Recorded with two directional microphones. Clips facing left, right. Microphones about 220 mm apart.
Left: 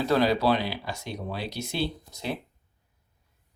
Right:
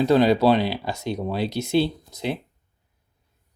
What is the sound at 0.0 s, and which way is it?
Speech, 20° right (ahead or behind).